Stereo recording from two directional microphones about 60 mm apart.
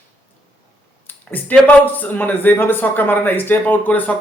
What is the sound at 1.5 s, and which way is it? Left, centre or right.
Speech, left.